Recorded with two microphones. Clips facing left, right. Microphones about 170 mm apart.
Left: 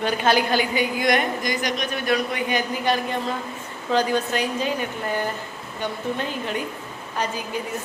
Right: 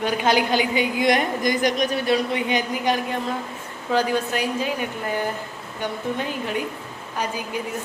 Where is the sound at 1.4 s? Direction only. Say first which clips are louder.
Right 5 dB; 50° right (ahead or behind).